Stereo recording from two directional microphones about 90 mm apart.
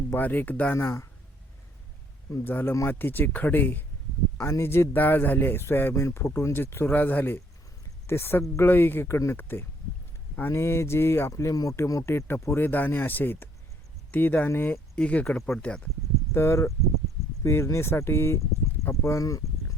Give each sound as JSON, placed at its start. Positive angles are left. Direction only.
{"t": 0.1, "sound": "speech", "side_deg": 20}
{"t": 2.3, "sound": "speech", "side_deg": 25}
{"t": 4.4, "sound": "speech", "side_deg": 30}
{"t": 14.9, "sound": "speech", "side_deg": 10}
{"t": 15.6, "sound": "speech", "side_deg": 15}
{"t": 16.3, "sound": "speech", "side_deg": 30}